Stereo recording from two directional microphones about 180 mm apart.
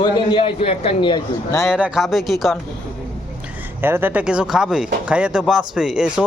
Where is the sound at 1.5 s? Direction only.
5° right (ahead or behind).